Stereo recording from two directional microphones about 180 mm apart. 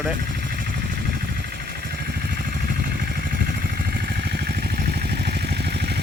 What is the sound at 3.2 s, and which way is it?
Vehicle, 55° right (ahead or behind).